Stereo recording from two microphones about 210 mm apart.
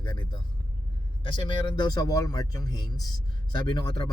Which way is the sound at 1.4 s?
20° left (ahead or behind).